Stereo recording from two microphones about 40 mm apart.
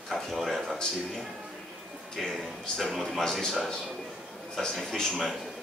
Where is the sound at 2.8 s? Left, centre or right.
Centre.